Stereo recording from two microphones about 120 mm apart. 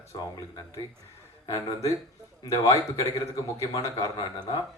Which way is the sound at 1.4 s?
30° left (ahead or behind).